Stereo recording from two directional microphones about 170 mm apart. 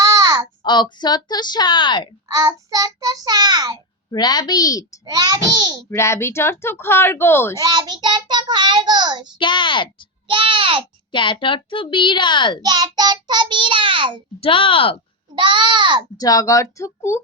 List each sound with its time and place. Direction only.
0.0 s a sound: 20° right (ahead or behind)
0.6 s a child's voice: 25° left (ahead or behind)
2.2 s child singing: 20° right (ahead or behind)
4.1 s a child's voice: 25° left (ahead or behind)
5.0 s child singing: 20° right (ahead or behind)
5.9 s speech: 15° left (ahead or behind)
7.6 s child singing: 25° right (ahead or behind)
9.4 s a child's voice: 30° left (ahead or behind)
10.2 s child singing: 30° right (ahead or behind)
11.1 s a child's voice: 30° left (ahead or behind)
12.6 s child singing: 25° right (ahead or behind)
14.4 s speech: 30° left (ahead or behind)
15.4 s child singing: 25° right (ahead or behind)
16.1 s a child's voice: 20° left (ahead or behind)